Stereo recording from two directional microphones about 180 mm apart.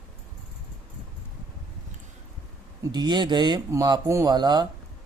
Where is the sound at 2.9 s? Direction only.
25° right (ahead or behind).